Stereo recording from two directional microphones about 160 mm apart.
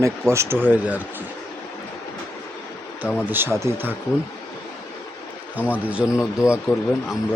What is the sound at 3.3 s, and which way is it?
Speech, 15° right (ahead or behind).